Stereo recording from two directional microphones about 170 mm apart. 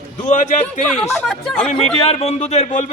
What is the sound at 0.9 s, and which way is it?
Speech, centre (ahead or behind).